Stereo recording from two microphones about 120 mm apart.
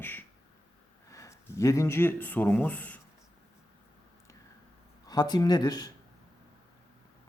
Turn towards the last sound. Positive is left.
turn(degrees=35)  # may be behind; listen again after turning